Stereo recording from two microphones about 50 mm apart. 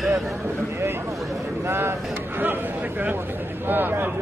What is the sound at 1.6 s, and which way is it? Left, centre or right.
Speech, right.